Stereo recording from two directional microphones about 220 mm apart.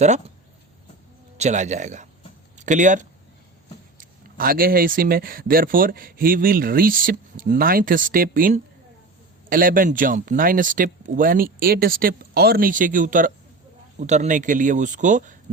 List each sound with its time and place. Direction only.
1.4 s speech: 30° right (ahead or behind)